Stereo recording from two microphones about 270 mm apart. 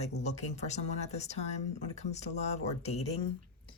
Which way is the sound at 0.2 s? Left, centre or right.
Left.